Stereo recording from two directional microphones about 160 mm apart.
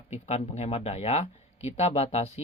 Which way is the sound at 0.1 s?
40° left (ahead or behind).